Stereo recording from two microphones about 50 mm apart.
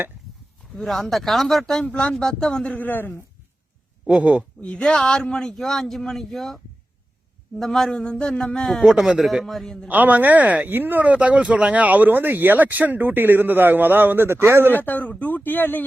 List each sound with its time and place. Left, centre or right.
0.8 s a man's voice: centre
1.8 s speech: left
2.1 s speech: centre
2.6 s a woman's voice: left
4.0 s speech: right
4.6 s speech: centre
7.6 s speech: centre
8.8 s a man's voice: centre
9.9 s speech: right
10.8 s speech: right
11.0 s speech: right
14.7 s a woman's voice: left